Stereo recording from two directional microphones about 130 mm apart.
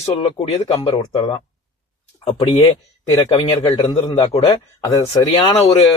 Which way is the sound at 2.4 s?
30° left (ahead or behind).